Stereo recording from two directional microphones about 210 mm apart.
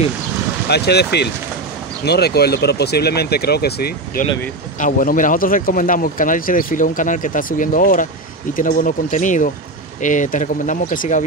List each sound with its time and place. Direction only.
0.7 s speech: 50° left (ahead or behind)